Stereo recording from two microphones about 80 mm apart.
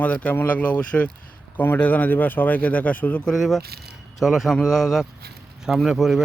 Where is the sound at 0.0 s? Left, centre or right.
Centre.